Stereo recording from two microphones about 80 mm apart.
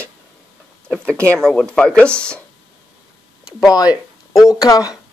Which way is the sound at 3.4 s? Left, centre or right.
Left.